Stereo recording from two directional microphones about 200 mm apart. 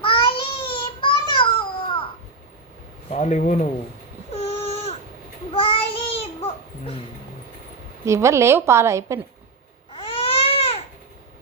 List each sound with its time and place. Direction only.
0.0 s child singing: 25° left (ahead or behind)
1.3 s babbling: 25° left (ahead or behind)
3.1 s speech: 35° left (ahead or behind)
4.3 s a sound: 30° left (ahead or behind)
5.5 s child singing: 25° left (ahead or behind)
8.0 s a woman's voice: 15° right (ahead or behind)
9.9 s baby cry: 25° left (ahead or behind)